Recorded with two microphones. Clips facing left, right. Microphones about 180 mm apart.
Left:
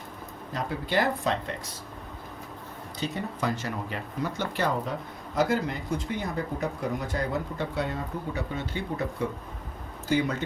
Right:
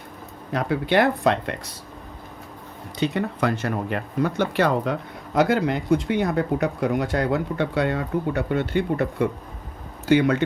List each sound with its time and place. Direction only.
0.5 s speech: 70° right (ahead or behind)
3.0 s speech: 70° right (ahead or behind)